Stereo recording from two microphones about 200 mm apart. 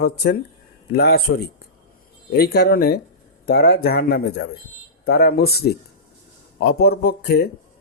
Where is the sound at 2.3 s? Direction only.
50° left (ahead or behind).